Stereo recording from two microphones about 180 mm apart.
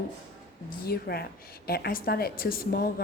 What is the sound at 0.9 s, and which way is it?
A woman's voice, 60° left (ahead or behind).